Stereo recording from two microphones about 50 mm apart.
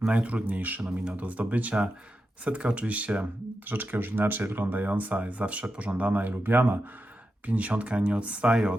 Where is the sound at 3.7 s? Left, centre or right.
Right.